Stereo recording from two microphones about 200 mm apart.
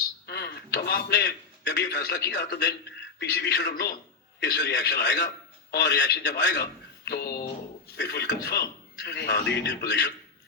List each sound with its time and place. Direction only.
0.3 s a man's voice: 55° left (ahead or behind)